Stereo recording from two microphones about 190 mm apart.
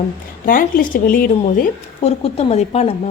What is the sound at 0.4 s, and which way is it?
Speech, 45° left (ahead or behind).